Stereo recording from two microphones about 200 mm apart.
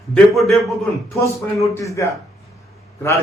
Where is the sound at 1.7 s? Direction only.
15° left (ahead or behind).